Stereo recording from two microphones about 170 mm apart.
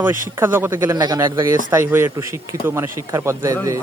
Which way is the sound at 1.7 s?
15° right (ahead or behind).